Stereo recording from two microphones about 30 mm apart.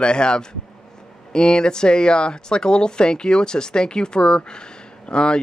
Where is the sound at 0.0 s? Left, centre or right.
Left.